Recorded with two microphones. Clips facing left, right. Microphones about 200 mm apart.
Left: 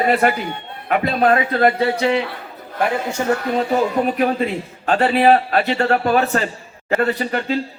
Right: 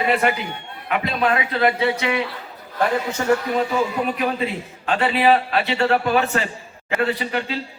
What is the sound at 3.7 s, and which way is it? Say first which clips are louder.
A man's voice: left 4 dB; 45° left (ahead or behind).